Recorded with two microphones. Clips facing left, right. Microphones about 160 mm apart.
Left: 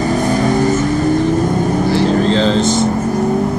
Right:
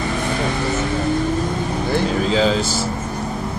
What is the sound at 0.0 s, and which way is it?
Vehicle, 40° left (ahead or behind).